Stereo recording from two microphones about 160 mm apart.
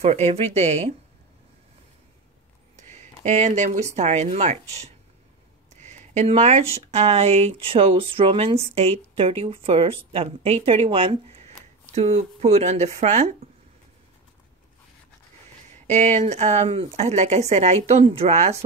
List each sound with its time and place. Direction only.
0.0 s speech: 40° right (ahead or behind)
2.7 s speech: 45° right (ahead or behind)
15.9 s speech: 45° right (ahead or behind)